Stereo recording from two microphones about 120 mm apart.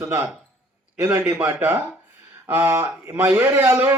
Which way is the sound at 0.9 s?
10° right (ahead or behind).